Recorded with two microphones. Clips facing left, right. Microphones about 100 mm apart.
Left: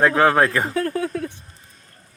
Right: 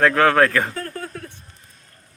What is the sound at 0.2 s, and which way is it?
Speech, 25° left (ahead or behind).